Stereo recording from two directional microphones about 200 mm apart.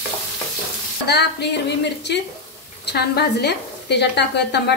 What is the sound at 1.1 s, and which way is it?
Speech, 55° left (ahead or behind).